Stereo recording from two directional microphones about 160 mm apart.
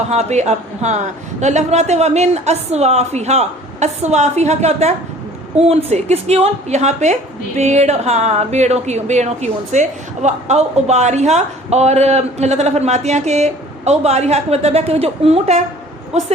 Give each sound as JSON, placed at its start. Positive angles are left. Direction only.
{"t": 0.1, "sound": "a man's voice", "side_deg": -45}